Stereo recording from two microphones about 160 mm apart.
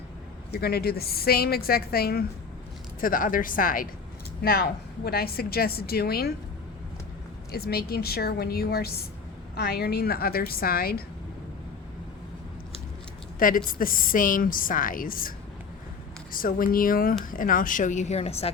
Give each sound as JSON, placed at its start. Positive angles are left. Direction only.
{"t": 0.5, "sound": "a woman's voice", "side_deg": 75}
{"t": 3.0, "sound": "a woman's voice", "side_deg": 60}
{"t": 4.4, "sound": "a woman's voice", "side_deg": 75}
{"t": 7.5, "sound": "a woman's voice", "side_deg": 75}
{"t": 13.7, "sound": "a woman's voice", "side_deg": 60}
{"t": 16.3, "sound": "a woman's voice", "side_deg": 65}